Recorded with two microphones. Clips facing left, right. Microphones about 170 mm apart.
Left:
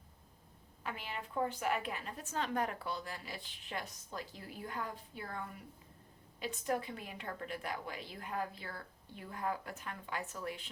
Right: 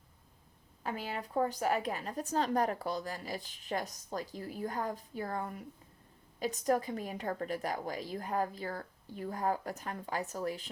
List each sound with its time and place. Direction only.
0.9 s a woman's voice: 40° right (ahead or behind)